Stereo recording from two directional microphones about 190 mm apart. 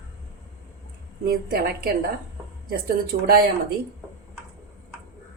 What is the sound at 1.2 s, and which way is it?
Speech, 50° right (ahead or behind).